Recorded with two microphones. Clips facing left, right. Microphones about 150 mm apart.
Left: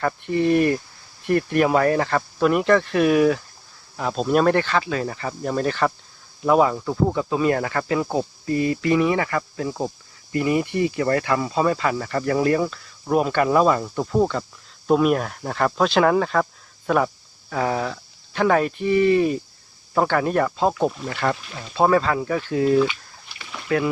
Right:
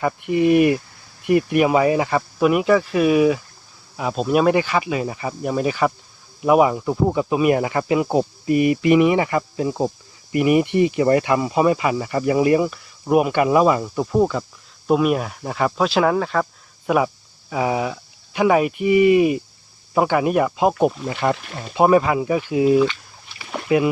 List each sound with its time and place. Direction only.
0.0 s speech: 10° right (ahead or behind)